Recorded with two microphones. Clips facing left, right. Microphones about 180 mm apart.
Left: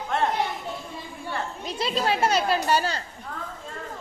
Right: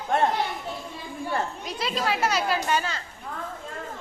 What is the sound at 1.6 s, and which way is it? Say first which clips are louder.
Speech: left 2 dB; 30° left (ahead or behind).